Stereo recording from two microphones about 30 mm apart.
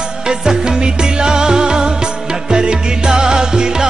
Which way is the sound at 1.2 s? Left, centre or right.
Right.